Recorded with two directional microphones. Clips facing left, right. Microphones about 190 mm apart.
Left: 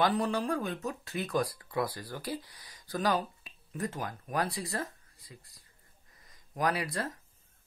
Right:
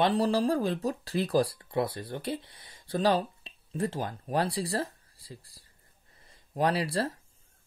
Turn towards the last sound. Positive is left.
turn(degrees=-30)  # may be behind; listen again after turning